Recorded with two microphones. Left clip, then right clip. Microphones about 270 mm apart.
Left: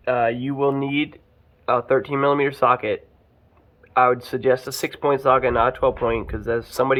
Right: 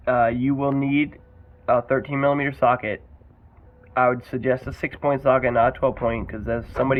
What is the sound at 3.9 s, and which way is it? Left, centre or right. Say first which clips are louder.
Speech: left 3 dB; centre.